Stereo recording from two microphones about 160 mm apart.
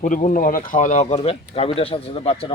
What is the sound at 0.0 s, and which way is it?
Speech, 50° left (ahead or behind).